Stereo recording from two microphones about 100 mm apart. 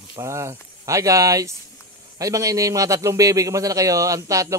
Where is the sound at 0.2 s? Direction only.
30° right (ahead or behind).